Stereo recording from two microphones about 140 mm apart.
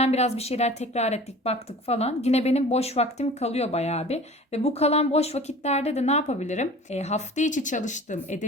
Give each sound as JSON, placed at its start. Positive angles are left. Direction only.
{"t": 0.0, "sound": "speech", "side_deg": 50}